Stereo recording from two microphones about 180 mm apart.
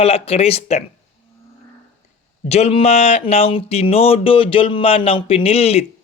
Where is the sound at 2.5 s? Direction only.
35° left (ahead or behind).